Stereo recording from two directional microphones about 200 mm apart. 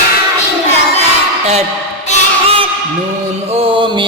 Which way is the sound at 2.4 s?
30° right (ahead or behind).